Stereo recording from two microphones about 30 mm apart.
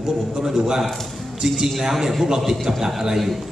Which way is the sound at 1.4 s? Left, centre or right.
Centre.